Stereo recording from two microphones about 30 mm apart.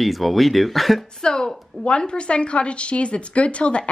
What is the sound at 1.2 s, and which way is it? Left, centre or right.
A woman's voice, left.